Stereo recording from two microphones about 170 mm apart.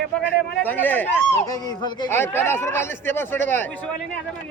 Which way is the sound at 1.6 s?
25° left (ahead or behind).